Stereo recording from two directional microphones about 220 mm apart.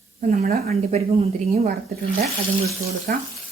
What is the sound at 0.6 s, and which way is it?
A woman's voice, 30° right (ahead or behind).